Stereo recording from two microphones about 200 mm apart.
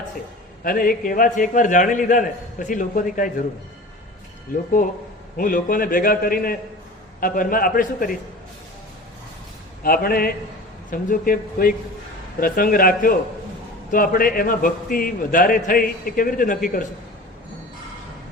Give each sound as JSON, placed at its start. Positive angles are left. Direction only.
{"t": 0.6, "sound": "a man's voice", "side_deg": 45}
{"t": 4.8, "sound": "a man's voice", "side_deg": 40}
{"t": 9.8, "sound": "a man's voice", "side_deg": 45}